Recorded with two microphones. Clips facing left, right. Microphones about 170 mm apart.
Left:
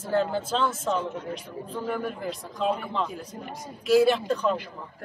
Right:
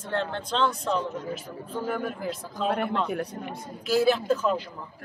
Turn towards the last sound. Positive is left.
turn(degrees=-5)  # may be behind; listen again after turning